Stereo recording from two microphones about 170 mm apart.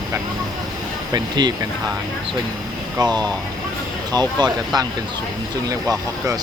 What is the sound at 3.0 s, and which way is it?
Speech, 25° right (ahead or behind).